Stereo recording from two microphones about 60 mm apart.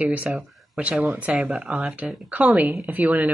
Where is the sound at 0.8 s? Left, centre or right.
Right.